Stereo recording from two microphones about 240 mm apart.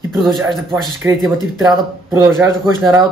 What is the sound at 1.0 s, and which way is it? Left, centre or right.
Speech, centre.